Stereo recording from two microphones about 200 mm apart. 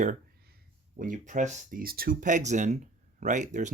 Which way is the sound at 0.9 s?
40° right (ahead or behind).